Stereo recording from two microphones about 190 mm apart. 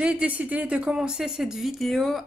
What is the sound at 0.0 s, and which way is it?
Speech, 5° right (ahead or behind).